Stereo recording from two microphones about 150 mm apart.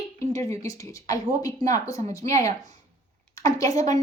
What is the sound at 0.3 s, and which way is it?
A woman's voice, 20° left (ahead or behind).